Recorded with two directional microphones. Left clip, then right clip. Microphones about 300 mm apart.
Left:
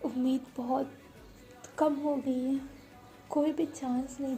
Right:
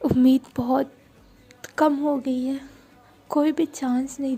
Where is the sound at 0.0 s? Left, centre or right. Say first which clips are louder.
Right 12 dB; right.